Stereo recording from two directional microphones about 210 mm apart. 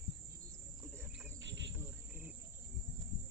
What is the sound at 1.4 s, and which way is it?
Cricket, 55° right (ahead or behind).